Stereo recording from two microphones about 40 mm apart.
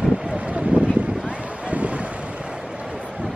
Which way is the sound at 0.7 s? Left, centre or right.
Right.